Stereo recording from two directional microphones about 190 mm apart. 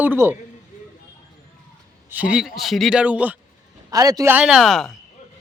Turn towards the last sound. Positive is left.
turn(degrees=0)  # may be behind; listen again after turning